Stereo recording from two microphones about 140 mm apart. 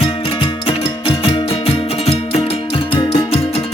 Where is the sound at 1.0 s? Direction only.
40° left (ahead or behind).